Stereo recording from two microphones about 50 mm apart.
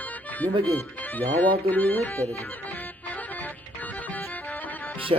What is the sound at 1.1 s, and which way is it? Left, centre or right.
Speech, left.